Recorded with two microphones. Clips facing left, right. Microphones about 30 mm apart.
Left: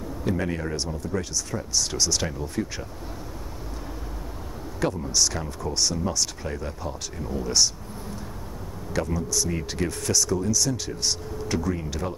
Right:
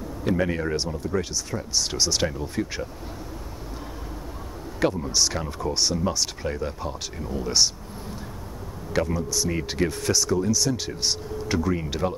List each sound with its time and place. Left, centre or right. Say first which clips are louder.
0.2 s speech: right 3 dB; centre
4.7 s speech: right 2 dB; centre
8.9 s speech: right 2 dB; centre